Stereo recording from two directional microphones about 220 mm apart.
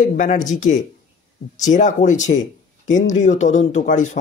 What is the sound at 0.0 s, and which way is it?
Speech, 35° left (ahead or behind).